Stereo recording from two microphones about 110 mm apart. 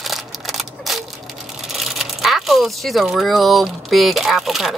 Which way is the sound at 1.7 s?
Centre (ahead or behind).